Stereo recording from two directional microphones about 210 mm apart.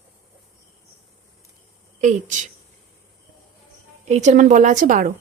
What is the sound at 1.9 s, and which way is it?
Speech, 35° right (ahead or behind).